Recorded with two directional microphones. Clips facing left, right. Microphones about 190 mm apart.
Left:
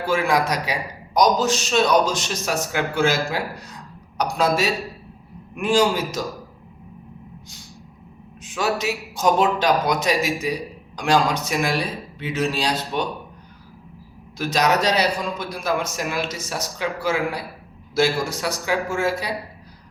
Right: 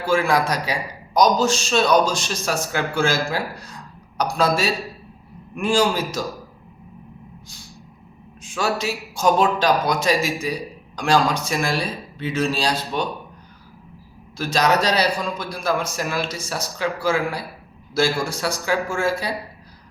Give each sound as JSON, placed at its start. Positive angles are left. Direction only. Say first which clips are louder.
{"t": 0.1, "sound": "a man's voice", "louder": "right 1 dB", "side_deg": 15}
{"t": 8.4, "sound": "a man's voice", "louder": "even", "side_deg": 20}
{"t": 14.3, "sound": "a man's voice", "louder": "right 1 dB", "side_deg": 15}